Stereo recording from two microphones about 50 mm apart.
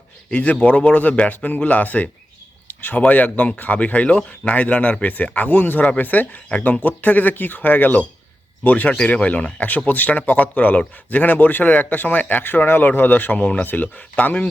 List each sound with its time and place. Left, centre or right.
0.3 s speech: left
2.6 s a sound: left
3.0 s speech: left